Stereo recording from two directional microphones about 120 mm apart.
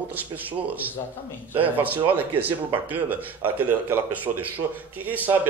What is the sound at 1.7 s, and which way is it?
Speech, 15° right (ahead or behind).